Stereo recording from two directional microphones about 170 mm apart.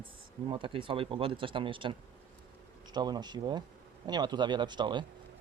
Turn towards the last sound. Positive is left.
turn(degrees=-25)  # may be behind; listen again after turning